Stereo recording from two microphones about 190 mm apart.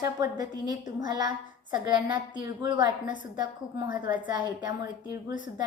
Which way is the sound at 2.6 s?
20° right (ahead or behind).